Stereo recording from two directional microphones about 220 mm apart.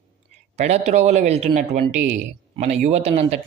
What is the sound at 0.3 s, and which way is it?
Speech, 30° right (ahead or behind).